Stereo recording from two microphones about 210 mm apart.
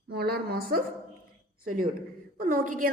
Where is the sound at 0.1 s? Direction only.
50° right (ahead or behind).